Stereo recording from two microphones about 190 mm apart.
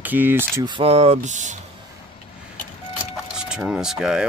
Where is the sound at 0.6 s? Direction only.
30° right (ahead or behind).